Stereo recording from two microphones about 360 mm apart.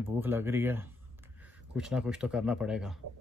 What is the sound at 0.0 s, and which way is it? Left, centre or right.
Speech, centre.